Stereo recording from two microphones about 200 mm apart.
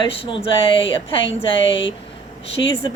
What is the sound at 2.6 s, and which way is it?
Speech, 20° left (ahead or behind).